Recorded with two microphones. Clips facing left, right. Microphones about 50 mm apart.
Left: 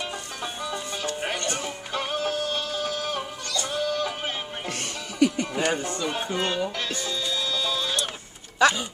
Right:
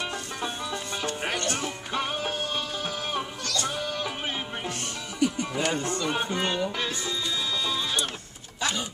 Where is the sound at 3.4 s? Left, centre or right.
Centre.